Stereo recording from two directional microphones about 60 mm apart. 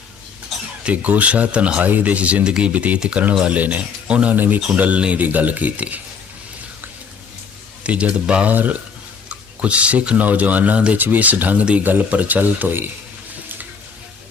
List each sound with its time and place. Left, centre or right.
0.9 s speech: right
7.9 s speech: centre
8.5 s speech: right